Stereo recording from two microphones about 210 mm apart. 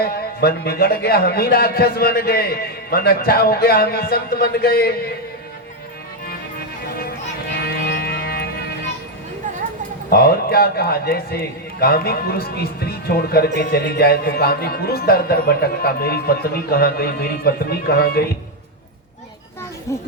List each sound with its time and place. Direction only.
0.0 s a man's voice: 50° left (ahead or behind)
7.7 s music: 50° left (ahead or behind)
10.1 s a man's voice: 45° left (ahead or behind)
19.9 s speech: 15° left (ahead or behind)